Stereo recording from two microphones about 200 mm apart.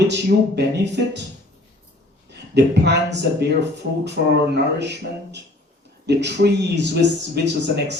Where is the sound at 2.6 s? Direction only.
60° right (ahead or behind).